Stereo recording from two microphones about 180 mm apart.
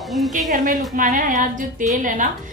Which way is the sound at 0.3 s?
45° right (ahead or behind).